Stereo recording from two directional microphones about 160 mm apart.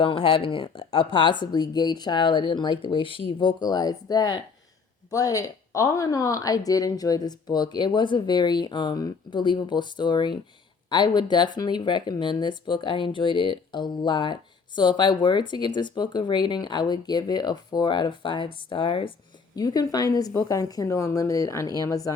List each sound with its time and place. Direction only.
0.0 s speech: 35° left (ahead or behind)